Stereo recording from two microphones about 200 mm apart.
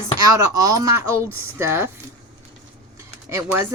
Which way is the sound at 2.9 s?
15° right (ahead or behind).